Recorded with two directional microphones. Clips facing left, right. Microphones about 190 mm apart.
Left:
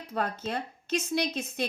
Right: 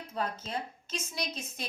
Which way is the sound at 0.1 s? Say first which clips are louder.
Left 4 dB; 65° left (ahead or behind).